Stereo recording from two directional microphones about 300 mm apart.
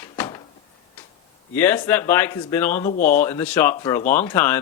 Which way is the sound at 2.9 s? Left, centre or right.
Left.